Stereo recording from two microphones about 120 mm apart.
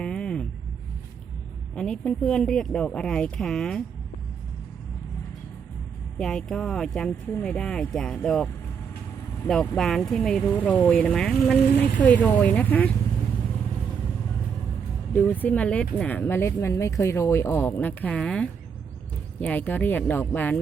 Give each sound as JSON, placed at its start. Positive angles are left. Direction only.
{"t": 0.0, "sound": "vehicle", "side_deg": 10}
{"t": 1.7, "sound": "speech", "side_deg": 5}
{"t": 6.1, "sound": "speech", "side_deg": 5}
{"t": 9.5, "sound": "speech", "side_deg": 5}
{"t": 10.5, "sound": "speech", "side_deg": 15}
{"t": 15.1, "sound": "speech", "side_deg": 15}